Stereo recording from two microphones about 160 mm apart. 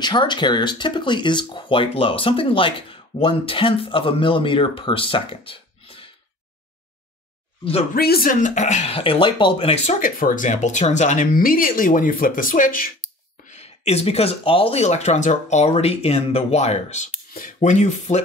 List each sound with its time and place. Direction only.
0.0 s speech: 30° left (ahead or behind)
7.9 s speech: 70° left (ahead or behind); by 9.9 s 35° left (ahead or behind)
9.9 s speech: 55° left (ahead or behind)
13.5 s speech: 40° left (ahead or behind)
17.3 s speech: 60° left (ahead or behind)